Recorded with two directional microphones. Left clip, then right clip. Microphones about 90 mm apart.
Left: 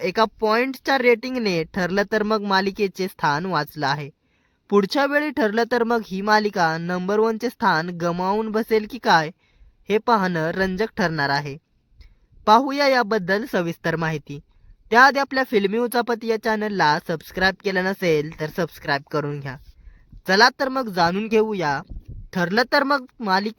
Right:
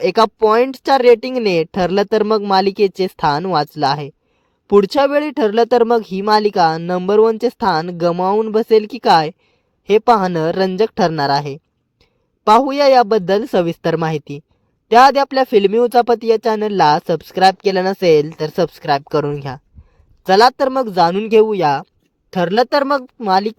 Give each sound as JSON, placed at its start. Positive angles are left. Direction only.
{"t": 0.0, "sound": "speech", "side_deg": -40}
{"t": 8.1, "sound": "speech", "side_deg": -10}
{"t": 8.5, "sound": "speech", "side_deg": -30}